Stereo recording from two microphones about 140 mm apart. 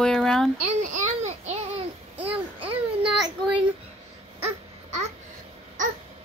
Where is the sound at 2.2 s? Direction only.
40° right (ahead or behind).